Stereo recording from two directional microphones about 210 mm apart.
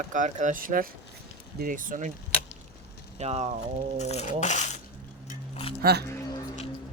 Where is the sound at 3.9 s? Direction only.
30° left (ahead or behind).